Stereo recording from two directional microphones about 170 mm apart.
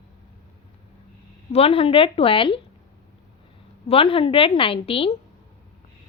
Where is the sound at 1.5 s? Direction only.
35° left (ahead or behind).